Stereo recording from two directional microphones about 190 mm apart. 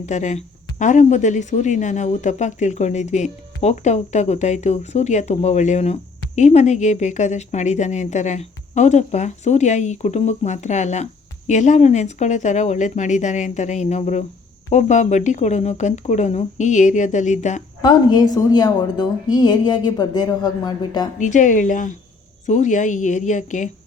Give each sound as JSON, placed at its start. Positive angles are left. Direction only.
{"t": 0.0, "sound": "speech", "side_deg": 40}
{"t": 17.8, "sound": "a woman's voice", "side_deg": 20}
{"t": 21.2, "sound": "speech", "side_deg": 40}